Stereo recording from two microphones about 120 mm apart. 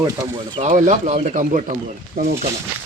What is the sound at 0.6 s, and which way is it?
Speech, 85° right.